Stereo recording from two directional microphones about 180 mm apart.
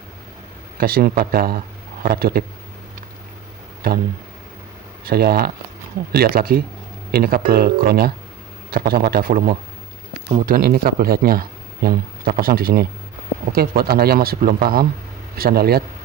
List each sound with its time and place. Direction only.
0.8 s speech: 55° right (ahead or behind)
3.8 s speech: 55° right (ahead or behind)
5.0 s speech: 55° right (ahead or behind)